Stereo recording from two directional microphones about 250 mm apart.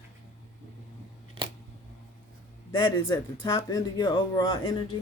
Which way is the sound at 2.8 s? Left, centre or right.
Centre.